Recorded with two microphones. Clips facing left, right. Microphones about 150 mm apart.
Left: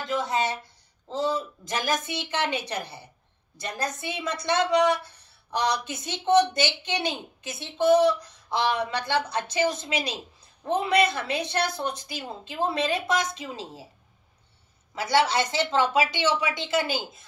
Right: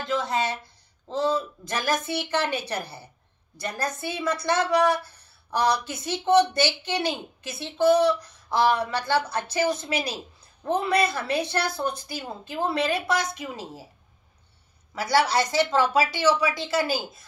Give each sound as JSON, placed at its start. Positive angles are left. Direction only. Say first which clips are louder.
{"t": 0.1, "sound": "a sound", "louder": "even", "side_deg": 15}
{"t": 1.1, "sound": "a woman's voice", "louder": "right 2 dB", "side_deg": 15}
{"t": 15.0, "sound": "speech", "louder": "right 1 dB", "side_deg": 25}